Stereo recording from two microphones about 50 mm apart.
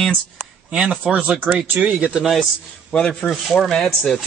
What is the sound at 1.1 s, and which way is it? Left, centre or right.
Speech, right.